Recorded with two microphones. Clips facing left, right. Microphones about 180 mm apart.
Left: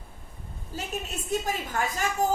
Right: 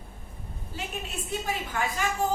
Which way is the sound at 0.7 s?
45° left (ahead or behind).